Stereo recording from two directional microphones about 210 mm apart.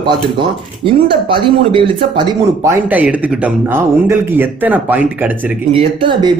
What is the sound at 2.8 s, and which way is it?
Speech, 5° right (ahead or behind).